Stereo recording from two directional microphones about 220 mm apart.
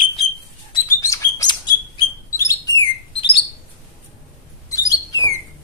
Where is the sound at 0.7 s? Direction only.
15° left (ahead or behind).